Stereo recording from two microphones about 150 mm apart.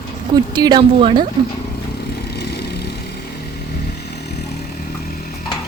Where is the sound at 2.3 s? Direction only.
90° left.